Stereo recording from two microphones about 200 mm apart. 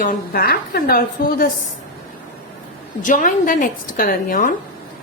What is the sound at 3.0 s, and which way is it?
A woman's voice, 40° left (ahead or behind).